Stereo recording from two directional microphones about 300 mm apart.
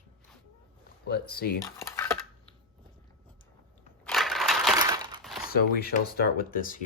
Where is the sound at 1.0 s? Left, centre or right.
Left.